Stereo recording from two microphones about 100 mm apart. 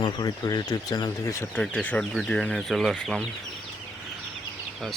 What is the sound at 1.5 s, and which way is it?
Speech, 5° left (ahead or behind).